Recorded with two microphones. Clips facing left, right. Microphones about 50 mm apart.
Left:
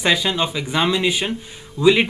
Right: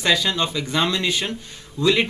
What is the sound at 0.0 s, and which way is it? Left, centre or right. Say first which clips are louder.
Speech: left 1 dB; centre.